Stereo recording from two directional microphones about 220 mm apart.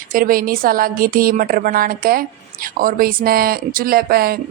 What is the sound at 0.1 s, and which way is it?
A woman's voice, 40° right (ahead or behind).